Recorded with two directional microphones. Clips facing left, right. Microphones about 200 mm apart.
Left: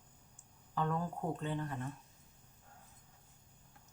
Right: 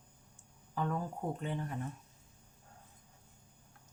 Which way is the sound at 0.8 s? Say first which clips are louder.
Even; 10° right (ahead or behind).